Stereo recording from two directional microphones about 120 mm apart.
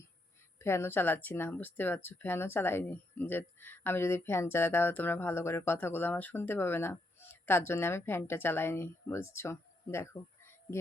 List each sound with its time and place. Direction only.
0.6 s speech: 20° left (ahead or behind)